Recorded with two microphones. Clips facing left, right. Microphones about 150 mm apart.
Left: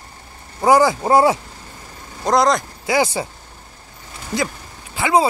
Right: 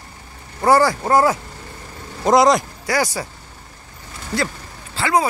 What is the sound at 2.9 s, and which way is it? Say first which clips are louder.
Speech: left 3 dB; 25° left (ahead or behind).